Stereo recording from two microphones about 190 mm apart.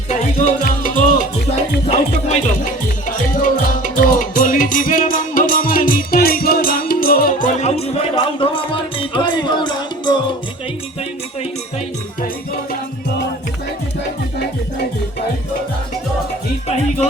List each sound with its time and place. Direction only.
0.1 s music: 45° left (ahead or behind); by 10.2 s 25° left (ahead or behind)